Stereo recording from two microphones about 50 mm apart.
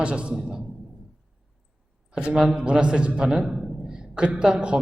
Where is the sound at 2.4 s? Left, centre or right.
Centre.